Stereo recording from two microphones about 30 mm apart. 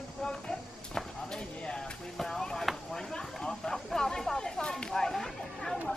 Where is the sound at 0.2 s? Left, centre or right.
Left.